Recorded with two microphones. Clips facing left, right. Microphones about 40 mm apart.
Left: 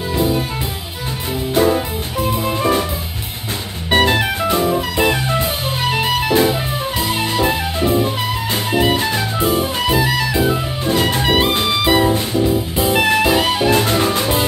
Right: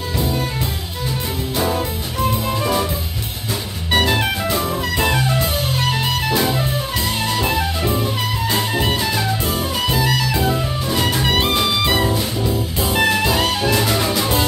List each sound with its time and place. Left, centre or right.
3.9 s music: left
4.9 s music: centre
8.9 s music: left
9.4 s music: centre
10.9 s jazz: left
11.2 s music: centre
13.2 s jazz: centre
13.7 s music: left